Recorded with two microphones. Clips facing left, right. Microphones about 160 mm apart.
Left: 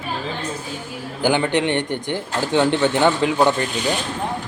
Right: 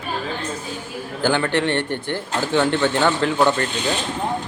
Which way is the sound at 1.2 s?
15° left (ahead or behind).